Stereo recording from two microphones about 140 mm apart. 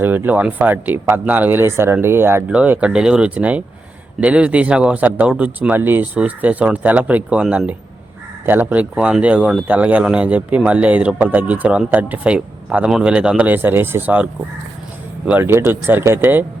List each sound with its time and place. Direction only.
0.0 s speech: 15° right (ahead or behind)
15.3 s speech: 15° right (ahead or behind)